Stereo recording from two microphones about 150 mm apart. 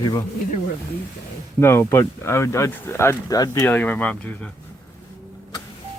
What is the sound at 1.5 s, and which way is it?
Speech, 15° left (ahead or behind).